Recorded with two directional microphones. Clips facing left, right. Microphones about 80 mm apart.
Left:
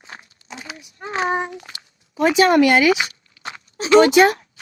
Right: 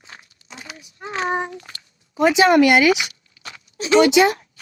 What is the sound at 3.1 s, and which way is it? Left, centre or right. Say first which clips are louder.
Walk: left 6 dB; left.